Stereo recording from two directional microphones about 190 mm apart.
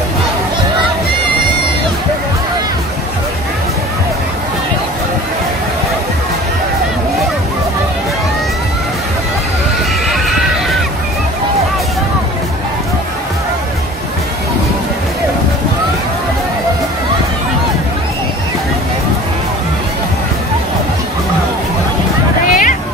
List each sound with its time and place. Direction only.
10.0 s neigh: centre (ahead or behind)
22.5 s hubbub: 45° left (ahead or behind)